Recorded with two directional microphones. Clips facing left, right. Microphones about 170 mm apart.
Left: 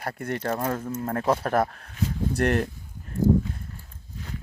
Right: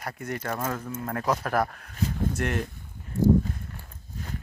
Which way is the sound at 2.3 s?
35° left (ahead or behind).